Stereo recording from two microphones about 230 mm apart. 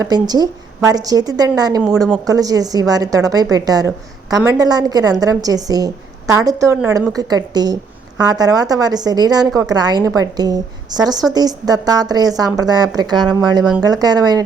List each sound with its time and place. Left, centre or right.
0.0 s a woman's voice: centre